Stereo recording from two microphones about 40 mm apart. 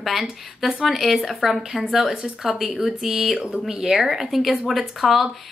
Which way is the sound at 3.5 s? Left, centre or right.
Right.